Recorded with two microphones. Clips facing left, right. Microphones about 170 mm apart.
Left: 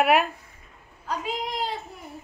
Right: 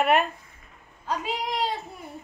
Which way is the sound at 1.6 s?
Centre (ahead or behind).